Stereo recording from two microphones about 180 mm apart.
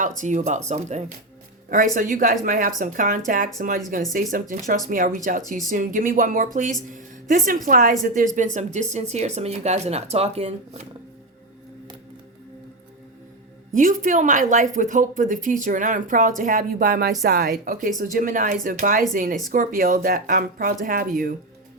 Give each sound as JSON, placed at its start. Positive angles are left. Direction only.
{"t": 0.2, "sound": "speech", "side_deg": -40}
{"t": 13.7, "sound": "speech", "side_deg": -45}